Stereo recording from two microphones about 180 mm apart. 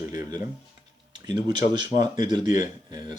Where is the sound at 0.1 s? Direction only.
20° right (ahead or behind).